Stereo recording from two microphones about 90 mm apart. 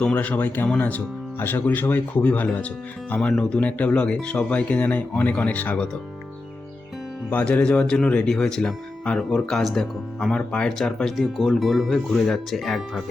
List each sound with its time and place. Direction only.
0.0 s speech: 15° left (ahead or behind)
7.3 s speech: 15° left (ahead or behind)